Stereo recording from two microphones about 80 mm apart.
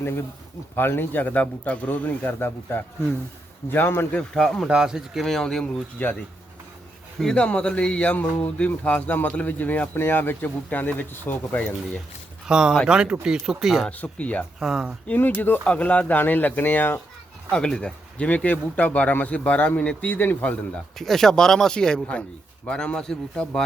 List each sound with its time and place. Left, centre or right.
0.0 s speech: left
4.4 s speech: centre
4.7 s speech: centre
5.2 s speech: centre
6.0 s speech: left
7.2 s speech: centre
12.5 s speech: centre
13.8 s speech: centre
14.6 s speech: centre
15.0 s speech: left
17.5 s speech: centre
21.0 s speech: centre